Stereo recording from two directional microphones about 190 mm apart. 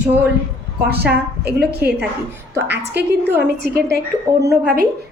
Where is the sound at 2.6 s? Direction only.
60° right (ahead or behind).